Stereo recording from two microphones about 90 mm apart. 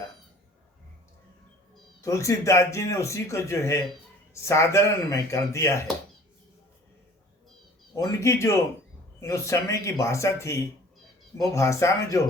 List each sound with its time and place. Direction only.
2.0 s speech: 35° left (ahead or behind)
7.9 s speech: 40° left (ahead or behind)